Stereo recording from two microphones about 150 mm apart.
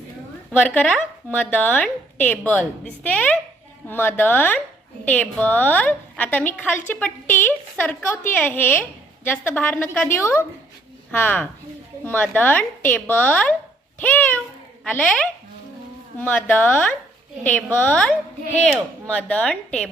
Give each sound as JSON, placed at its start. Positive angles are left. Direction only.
{"t": 0.6, "sound": "a woman's voice", "side_deg": 10}